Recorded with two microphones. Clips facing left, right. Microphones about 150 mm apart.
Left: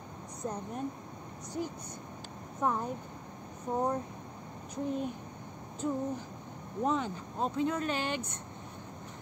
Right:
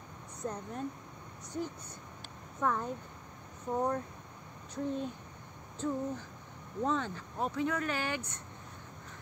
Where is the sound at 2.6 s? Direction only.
20° left (ahead or behind).